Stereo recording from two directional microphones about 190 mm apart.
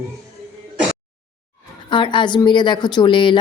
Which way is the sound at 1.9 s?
25° left (ahead or behind).